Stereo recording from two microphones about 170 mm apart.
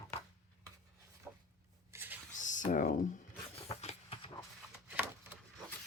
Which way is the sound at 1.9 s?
15° right (ahead or behind).